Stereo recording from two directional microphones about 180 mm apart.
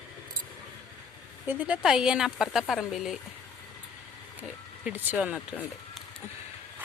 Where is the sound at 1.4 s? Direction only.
10° right (ahead or behind).